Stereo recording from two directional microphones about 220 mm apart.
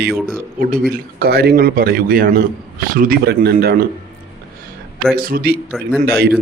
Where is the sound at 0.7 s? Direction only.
45° right (ahead or behind).